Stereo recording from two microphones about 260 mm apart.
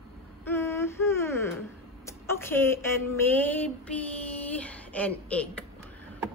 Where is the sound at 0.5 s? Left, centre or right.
Centre.